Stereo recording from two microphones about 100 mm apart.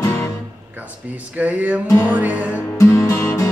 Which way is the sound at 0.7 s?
15° right (ahead or behind).